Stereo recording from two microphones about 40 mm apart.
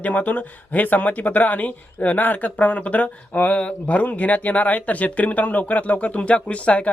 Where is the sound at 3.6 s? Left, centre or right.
Left.